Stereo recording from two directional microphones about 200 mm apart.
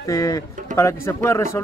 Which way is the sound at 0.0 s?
15° left (ahead or behind).